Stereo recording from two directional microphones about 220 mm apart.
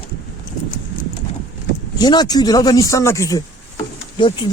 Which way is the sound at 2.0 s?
20° left (ahead or behind).